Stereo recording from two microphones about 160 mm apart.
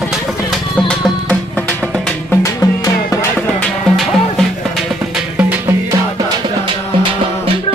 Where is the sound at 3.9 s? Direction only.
Centre (ahead or behind).